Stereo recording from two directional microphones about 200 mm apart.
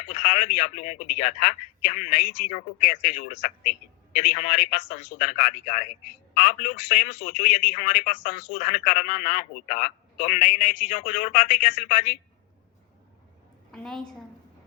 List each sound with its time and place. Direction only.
0.1 s a man's voice: 40° left (ahead or behind)
13.7 s a woman's voice: 5° left (ahead or behind)